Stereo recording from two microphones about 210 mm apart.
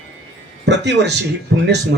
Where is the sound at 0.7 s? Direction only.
55° right (ahead or behind).